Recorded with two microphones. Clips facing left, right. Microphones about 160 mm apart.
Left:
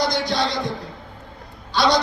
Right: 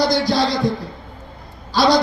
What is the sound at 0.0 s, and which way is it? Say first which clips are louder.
Speech: right 5 dB; 35° right (ahead or behind).